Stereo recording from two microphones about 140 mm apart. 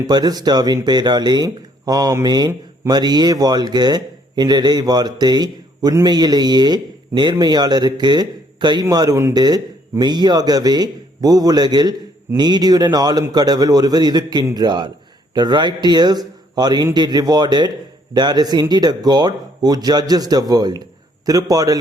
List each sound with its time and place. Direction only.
0.1 s a man's voice: 30° right (ahead or behind)